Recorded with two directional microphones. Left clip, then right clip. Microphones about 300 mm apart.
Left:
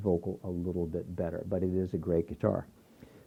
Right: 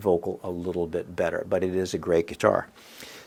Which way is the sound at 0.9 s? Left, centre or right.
Centre.